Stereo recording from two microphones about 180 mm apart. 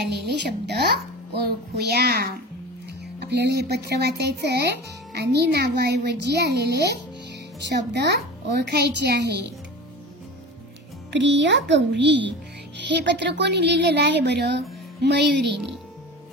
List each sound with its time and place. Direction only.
0.0 s a child's voice: 65° right (ahead or behind)
11.1 s a child's voice: 80° right